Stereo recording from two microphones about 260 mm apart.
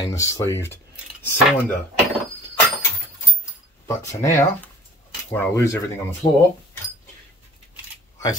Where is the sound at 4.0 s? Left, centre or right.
Centre.